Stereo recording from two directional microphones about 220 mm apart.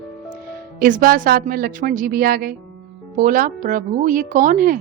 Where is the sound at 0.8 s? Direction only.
40° right (ahead or behind).